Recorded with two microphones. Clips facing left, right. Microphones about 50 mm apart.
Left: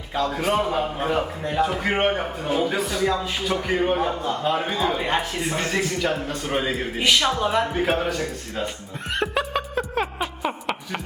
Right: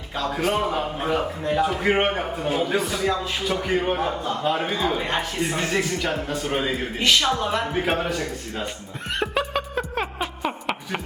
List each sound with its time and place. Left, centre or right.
0.1 s a man's voice: centre
7.7 s a man's voice: centre
9.1 s chuckle: centre